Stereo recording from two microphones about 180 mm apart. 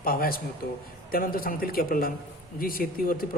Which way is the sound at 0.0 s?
55° left (ahead or behind).